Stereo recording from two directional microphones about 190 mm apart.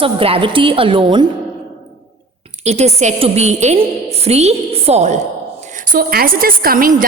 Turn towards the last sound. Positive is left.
turn(degrees=-45)  # may be behind; listen again after turning